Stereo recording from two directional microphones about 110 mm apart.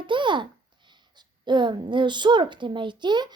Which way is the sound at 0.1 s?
45° right (ahead or behind).